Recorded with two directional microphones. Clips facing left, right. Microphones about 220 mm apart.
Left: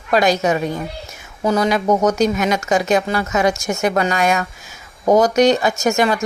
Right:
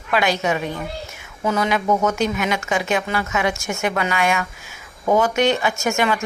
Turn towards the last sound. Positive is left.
turn(degrees=40)  # may be behind; listen again after turning